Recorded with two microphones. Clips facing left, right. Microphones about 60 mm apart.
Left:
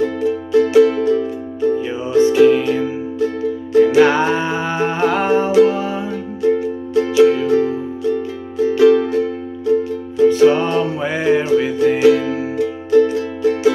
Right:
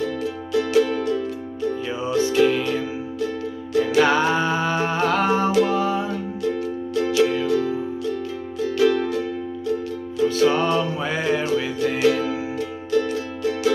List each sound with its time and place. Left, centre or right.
0.0 s music: left; by 6.1 s centre
6.4 s music: left
7.4 s music: left; by 12.3 s centre
12.9 s music: left